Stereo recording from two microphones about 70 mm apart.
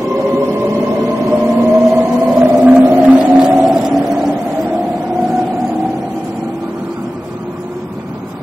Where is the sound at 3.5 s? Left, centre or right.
Centre.